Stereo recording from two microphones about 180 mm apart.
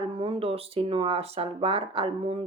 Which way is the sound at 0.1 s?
30° right (ahead or behind).